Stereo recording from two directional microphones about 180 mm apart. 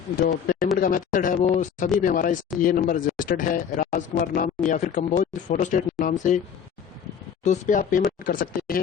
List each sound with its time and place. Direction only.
0.2 s speech: 55° left (ahead or behind)
7.4 s speech: 45° left (ahead or behind)